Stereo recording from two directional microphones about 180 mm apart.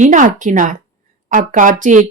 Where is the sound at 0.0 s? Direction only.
45° right (ahead or behind).